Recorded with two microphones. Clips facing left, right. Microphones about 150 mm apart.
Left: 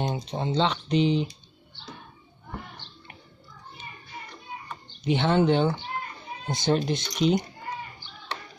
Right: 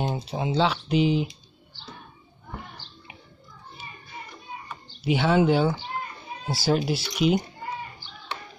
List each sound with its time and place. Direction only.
0.0 s speech: 5° right (ahead or behind)
5.0 s speech: 5° right (ahead or behind)